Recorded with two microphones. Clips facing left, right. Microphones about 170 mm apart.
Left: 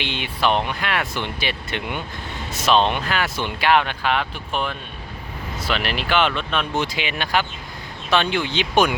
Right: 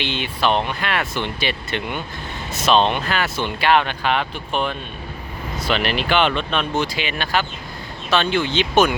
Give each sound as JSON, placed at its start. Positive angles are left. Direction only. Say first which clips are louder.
{"t": 0.0, "sound": "speech", "louder": "right 1 dB", "side_deg": 15}
{"t": 6.7, "sound": "speech", "louder": "right 1 dB", "side_deg": 20}